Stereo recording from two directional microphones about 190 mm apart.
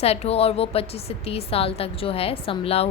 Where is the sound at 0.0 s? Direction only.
35° left (ahead or behind).